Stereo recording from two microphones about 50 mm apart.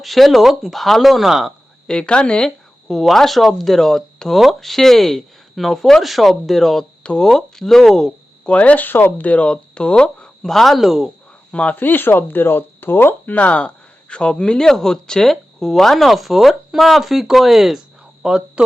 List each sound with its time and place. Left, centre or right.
0.0 s speech: centre
1.9 s speech: centre
2.8 s speech: centre
4.4 s speech: centre
7.0 s speech: left
7.3 s speech: centre
8.4 s speech: left
8.9 s speech: left
9.2 s speech: left
10.4 s speech: centre
11.5 s speech: left
13.3 s speech: left; by 18.6 s centre